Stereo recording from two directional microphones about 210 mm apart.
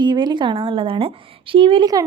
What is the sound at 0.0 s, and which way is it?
A woman's voice, 20° right (ahead or behind).